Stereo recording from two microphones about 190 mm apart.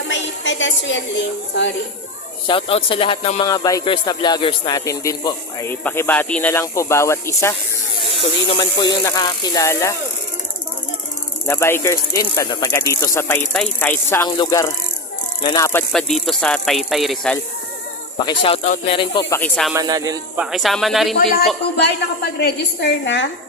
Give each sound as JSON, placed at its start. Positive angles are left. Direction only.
{"t": 0.1, "sound": "a sound", "side_deg": 75}
{"t": 2.5, "sound": "speech", "side_deg": 30}
{"t": 3.5, "sound": "speech", "side_deg": 20}
{"t": 8.5, "sound": "speech", "side_deg": 20}
{"t": 11.4, "sound": "speech", "side_deg": 10}
{"t": 15.9, "sound": "speech", "side_deg": 0}
{"t": 18.3, "sound": "speech", "side_deg": 30}
{"t": 19.3, "sound": "speech", "side_deg": 5}
{"t": 19.7, "sound": "speech", "side_deg": -20}
{"t": 20.4, "sound": "speech", "side_deg": 0}
{"t": 21.8, "sound": "a woman's voice", "side_deg": 65}